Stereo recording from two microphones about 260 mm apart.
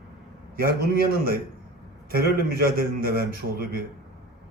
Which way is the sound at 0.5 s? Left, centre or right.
Right.